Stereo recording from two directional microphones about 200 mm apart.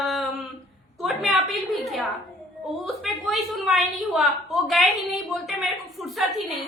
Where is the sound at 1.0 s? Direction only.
Centre (ahead or behind).